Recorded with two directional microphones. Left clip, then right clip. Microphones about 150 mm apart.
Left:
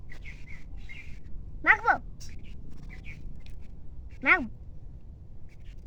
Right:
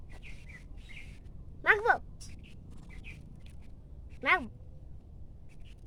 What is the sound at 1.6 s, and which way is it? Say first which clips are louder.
Speech: left 3 dB; 25° right (ahead or behind).